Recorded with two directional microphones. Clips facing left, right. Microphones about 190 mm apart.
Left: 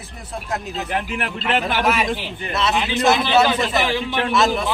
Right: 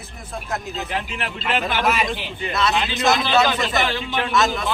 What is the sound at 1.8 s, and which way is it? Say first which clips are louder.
A man's voice: left 2 dB; 5° left (ahead or behind).